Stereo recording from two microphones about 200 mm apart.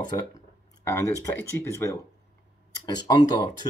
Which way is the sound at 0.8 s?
15° left (ahead or behind).